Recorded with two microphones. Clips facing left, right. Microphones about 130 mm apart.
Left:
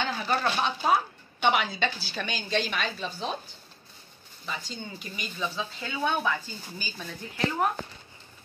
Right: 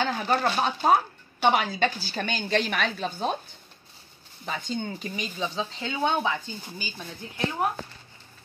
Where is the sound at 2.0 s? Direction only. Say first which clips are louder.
Right 4 dB; 50° right (ahead or behind).